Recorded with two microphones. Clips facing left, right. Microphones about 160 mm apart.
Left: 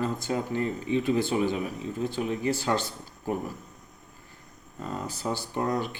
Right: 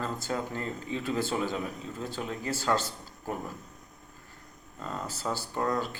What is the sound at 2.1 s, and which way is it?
Speech, 15° left (ahead or behind).